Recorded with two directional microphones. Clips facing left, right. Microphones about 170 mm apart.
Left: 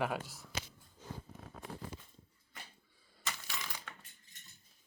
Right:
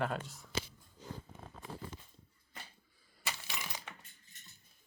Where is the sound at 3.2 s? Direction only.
20° right (ahead or behind).